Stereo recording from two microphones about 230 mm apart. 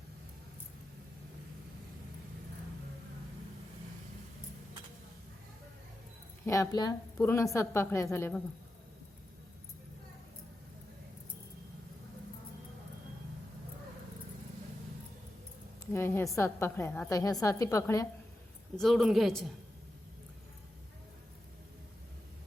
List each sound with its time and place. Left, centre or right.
6.4 s a woman's voice: centre
15.9 s a woman's voice: centre
18.8 s speech: centre